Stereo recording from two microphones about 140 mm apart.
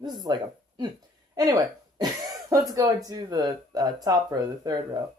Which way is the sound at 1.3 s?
25° right (ahead or behind).